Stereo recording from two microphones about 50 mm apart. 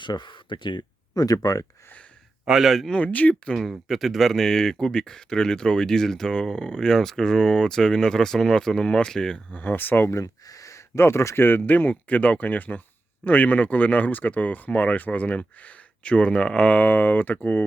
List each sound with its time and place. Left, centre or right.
2.5 s a man's voice: centre
2.9 s speech: left
3.7 s speech: centre
9.5 s speech: left
10.2 s speech: left
11.3 s speech: left
16.8 s speech: left